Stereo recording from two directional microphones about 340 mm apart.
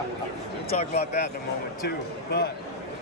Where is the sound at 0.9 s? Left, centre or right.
Left.